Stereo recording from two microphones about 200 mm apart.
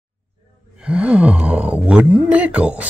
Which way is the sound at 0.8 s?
5° right (ahead or behind).